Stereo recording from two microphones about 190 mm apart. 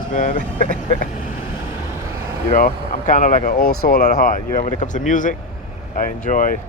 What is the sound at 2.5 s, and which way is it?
Speech, 45° left (ahead or behind).